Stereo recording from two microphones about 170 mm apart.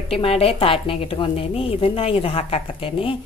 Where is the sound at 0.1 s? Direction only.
35° left (ahead or behind).